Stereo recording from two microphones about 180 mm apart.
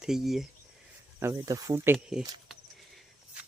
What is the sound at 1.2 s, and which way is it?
Speech, 15° right (ahead or behind).